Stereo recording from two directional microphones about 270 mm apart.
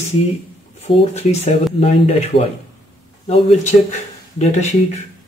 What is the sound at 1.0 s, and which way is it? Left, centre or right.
Speech, left.